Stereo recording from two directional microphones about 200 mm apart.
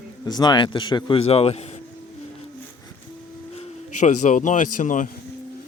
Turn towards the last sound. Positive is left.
turn(degrees=40)  # may be behind; listen again after turning